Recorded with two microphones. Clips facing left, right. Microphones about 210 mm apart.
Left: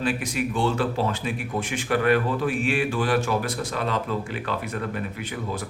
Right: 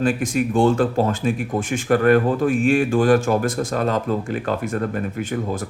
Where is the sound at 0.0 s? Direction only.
45° right (ahead or behind).